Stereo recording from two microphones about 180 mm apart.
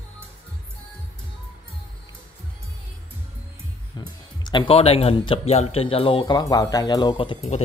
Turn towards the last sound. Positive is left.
turn(degrees=30)  # may be behind; listen again after turning